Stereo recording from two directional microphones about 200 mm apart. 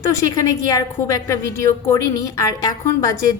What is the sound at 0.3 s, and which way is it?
A woman's voice, 15° left (ahead or behind).